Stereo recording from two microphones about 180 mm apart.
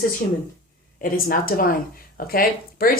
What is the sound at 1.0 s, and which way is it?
A woman's voice, 55° left (ahead or behind).